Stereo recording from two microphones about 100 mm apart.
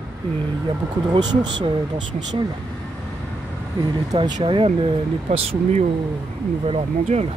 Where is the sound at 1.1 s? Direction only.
55° right (ahead or behind).